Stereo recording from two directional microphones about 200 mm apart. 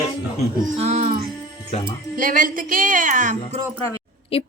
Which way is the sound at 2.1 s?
45° right (ahead or behind).